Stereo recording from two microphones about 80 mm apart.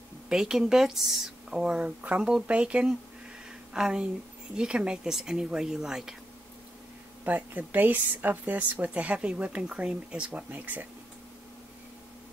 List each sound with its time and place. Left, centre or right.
0.3 s speech: centre
7.2 s speech: right